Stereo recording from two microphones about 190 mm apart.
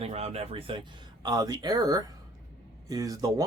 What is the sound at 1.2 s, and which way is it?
Speech, 20° right (ahead or behind).